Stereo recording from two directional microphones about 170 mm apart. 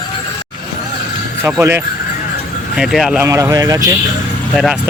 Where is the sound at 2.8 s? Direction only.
Centre (ahead or behind).